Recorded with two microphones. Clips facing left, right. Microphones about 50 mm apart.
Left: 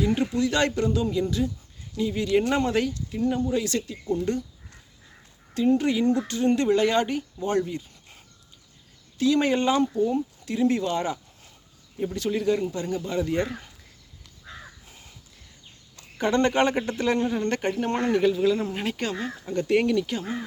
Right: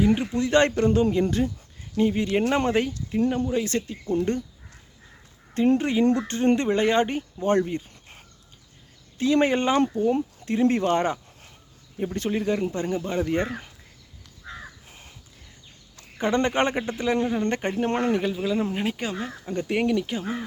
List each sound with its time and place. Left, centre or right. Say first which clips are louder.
0.0 s speech: right 1 dB; right
2.1 s speech: even; right
5.5 s speech: right 1 dB; right
12.4 s speech: left 2 dB; right
12.6 s speech: right 2 dB; right
14.8 s crow: right 2 dB; right
16.1 s speech: left 1 dB; right
16.7 s speech: even; centre
18.2 s speech: left 3 dB; centre